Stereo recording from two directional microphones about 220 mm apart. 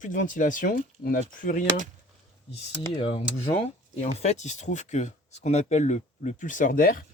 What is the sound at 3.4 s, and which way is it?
Speech, 30° left (ahead or behind).